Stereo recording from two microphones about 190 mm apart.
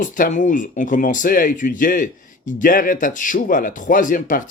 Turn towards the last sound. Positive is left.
turn(degrees=45)  # may be behind; listen again after turning